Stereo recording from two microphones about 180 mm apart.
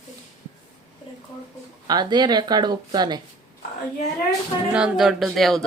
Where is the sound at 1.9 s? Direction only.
25° right (ahead or behind).